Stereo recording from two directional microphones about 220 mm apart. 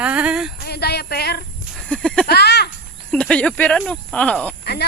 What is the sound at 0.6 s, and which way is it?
Speech, 45° left (ahead or behind).